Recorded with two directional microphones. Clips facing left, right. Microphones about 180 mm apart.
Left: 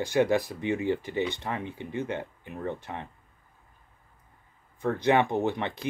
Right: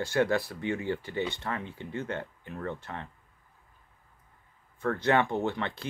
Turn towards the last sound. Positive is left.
turn(degrees=15)  # may be behind; listen again after turning